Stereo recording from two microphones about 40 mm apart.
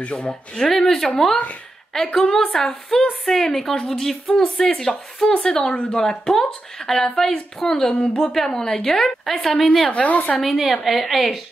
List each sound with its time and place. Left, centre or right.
0.0 s a woman's voice: left
0.3 s a woman's voice: centre
9.9 s a woman's voice: left
10.4 s a woman's voice: centre